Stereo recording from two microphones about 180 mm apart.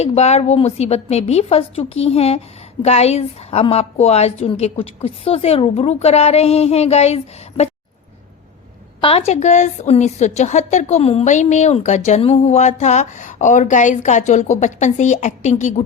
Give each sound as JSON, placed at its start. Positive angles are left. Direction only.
{"t": 0.0, "sound": "a woman's voice", "side_deg": 35}
{"t": 9.0, "sound": "a woman's voice", "side_deg": 30}